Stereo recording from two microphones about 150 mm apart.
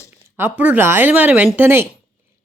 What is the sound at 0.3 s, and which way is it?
Speech, 10° right (ahead or behind).